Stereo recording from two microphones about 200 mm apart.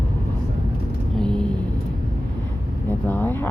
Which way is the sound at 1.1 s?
5° left (ahead or behind).